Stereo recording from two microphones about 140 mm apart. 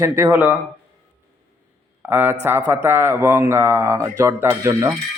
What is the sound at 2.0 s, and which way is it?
Speech, 15° right (ahead or behind).